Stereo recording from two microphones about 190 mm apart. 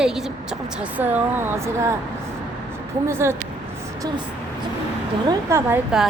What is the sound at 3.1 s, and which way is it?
Speech, 15° right (ahead or behind).